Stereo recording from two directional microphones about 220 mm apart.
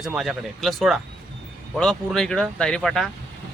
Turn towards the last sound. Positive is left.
turn(degrees=0)  # may be behind; listen again after turning